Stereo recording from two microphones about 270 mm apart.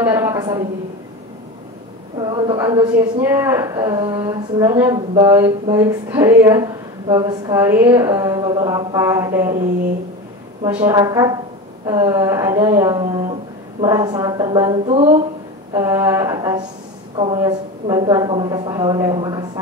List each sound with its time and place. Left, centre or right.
0.0 s a sound: centre
2.1 s speech: centre
10.6 s a woman's voice: centre
15.7 s speech: centre